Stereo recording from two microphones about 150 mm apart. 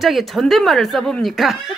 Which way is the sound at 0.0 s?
Centre (ahead or behind).